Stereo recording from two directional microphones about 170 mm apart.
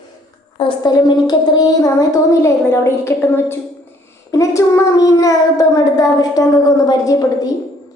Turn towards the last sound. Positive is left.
turn(degrees=20)  # may be behind; listen again after turning